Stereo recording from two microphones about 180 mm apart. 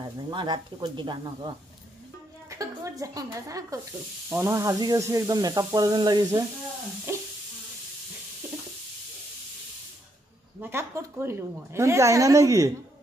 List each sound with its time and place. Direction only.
0.3 s speech: 25° right (ahead or behind)
2.5 s a woman's voice: 20° right (ahead or behind)
7.1 s sizzle: 15° right (ahead or behind)
10.6 s a woman's voice: 15° right (ahead or behind)